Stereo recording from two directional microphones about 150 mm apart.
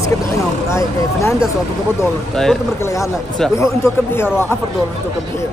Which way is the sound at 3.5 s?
20° left (ahead or behind).